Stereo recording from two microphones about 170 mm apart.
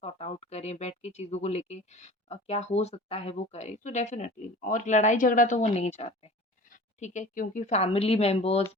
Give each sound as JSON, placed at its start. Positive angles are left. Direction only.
{"t": 0.0, "sound": "speech", "side_deg": 35}